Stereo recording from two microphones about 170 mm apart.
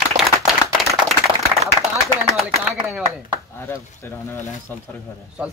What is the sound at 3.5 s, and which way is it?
Speech, 15° left (ahead or behind).